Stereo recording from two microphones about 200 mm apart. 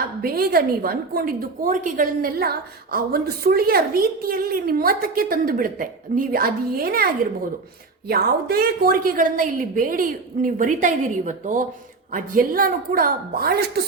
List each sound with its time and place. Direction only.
0.2 s a woman's voice: 50° right (ahead or behind)